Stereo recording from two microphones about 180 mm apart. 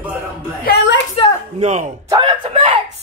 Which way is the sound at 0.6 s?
70° left (ahead or behind).